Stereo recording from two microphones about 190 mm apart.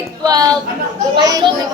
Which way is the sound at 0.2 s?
20° right (ahead or behind).